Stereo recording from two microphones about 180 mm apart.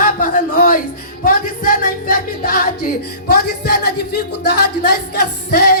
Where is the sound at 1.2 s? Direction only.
50° left (ahead or behind).